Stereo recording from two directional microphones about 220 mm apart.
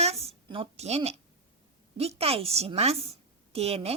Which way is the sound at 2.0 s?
25° right (ahead or behind).